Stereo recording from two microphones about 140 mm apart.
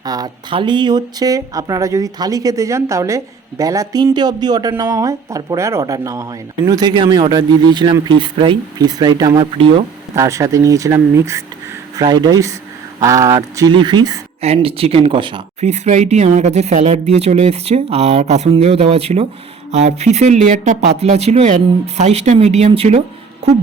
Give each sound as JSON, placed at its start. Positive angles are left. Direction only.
{"t": 0.0, "sound": "speech", "side_deg": -30}
{"t": 10.2, "sound": "speech", "side_deg": -20}
{"t": 14.4, "sound": "speech", "side_deg": -45}
{"t": 15.6, "sound": "speech", "side_deg": -55}